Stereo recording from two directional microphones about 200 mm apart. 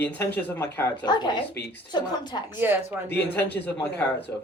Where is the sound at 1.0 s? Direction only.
20° left (ahead or behind).